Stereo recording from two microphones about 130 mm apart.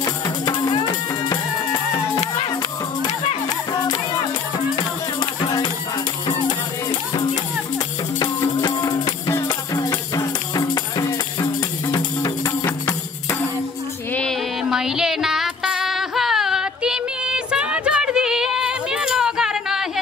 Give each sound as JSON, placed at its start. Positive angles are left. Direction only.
{"t": 0.0, "sound": "music", "side_deg": 35}
{"t": 5.2, "sound": "music", "side_deg": 35}
{"t": 8.2, "sound": "music", "side_deg": 30}
{"t": 14.6, "sound": "a sound", "side_deg": -5}